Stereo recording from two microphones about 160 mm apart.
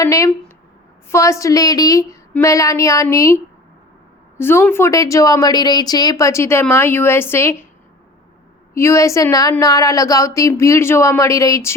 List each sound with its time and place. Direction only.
0.0 s a sound: 20° left (ahead or behind)
1.1 s a woman's voice: 20° left (ahead or behind)
8.7 s speech: 20° left (ahead or behind)